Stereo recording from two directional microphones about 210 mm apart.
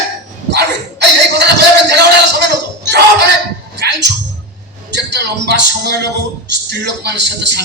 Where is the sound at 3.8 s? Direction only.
55° right (ahead or behind).